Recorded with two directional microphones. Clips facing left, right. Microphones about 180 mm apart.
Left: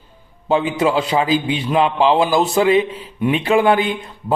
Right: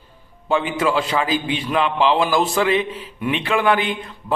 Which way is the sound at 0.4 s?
25° left (ahead or behind).